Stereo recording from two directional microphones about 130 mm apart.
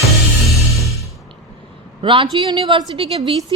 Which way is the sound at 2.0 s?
40° right (ahead or behind).